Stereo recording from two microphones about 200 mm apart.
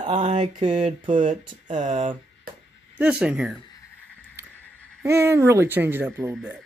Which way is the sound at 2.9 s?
5° right (ahead or behind).